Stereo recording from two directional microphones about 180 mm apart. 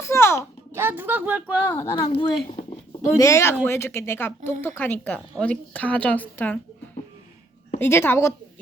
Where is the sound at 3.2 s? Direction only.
15° left (ahead or behind).